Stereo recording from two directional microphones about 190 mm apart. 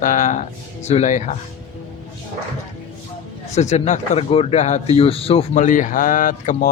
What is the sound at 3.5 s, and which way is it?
Speech, 35° left (ahead or behind).